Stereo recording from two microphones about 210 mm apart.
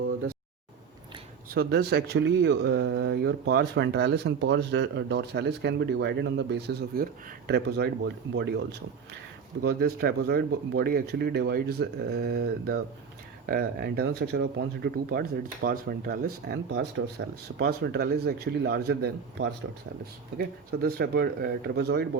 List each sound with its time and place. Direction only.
1.5 s speech: 50° right (ahead or behind)
9.6 s speech: 50° right (ahead or behind)